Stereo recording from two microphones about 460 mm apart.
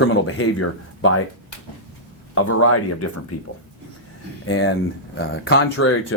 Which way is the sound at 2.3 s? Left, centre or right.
Left.